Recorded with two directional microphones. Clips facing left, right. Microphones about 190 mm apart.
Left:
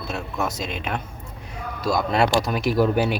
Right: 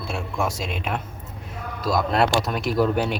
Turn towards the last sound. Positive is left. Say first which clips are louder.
# left 2 dB
turn(degrees=5)  # may be behind; listen again after turning